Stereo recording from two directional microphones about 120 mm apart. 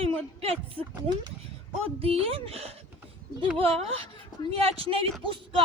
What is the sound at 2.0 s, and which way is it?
A woman's voice, 55° right (ahead or behind).